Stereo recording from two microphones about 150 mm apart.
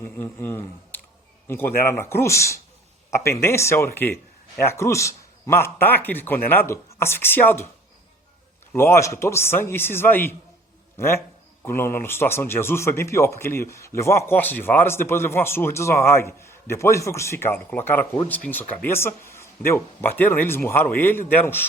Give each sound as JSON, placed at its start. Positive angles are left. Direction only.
{"t": 0.0, "sound": "speech", "side_deg": 15}
{"t": 8.7, "sound": "a man's voice", "side_deg": 15}